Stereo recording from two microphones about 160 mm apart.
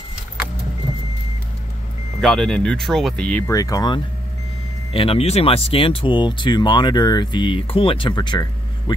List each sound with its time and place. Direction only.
2.2 s speech: 5° left (ahead or behind)
3.4 s speech: 20° left (ahead or behind)
4.9 s speech: 35° left (ahead or behind)